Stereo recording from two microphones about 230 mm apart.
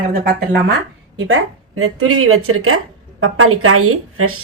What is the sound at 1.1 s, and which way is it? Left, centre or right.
A woman's voice, right.